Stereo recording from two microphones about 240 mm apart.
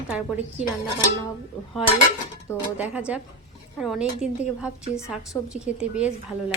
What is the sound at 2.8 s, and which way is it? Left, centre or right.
Speech, centre.